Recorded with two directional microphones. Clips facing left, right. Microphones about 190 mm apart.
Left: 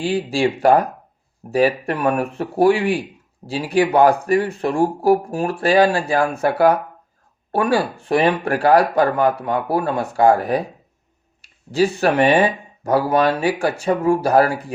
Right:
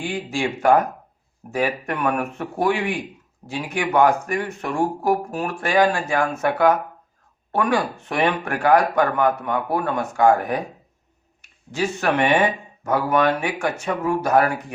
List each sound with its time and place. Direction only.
0.0 s speech: 35° left (ahead or behind)